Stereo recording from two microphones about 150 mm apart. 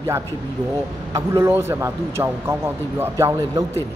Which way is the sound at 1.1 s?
15° right (ahead or behind).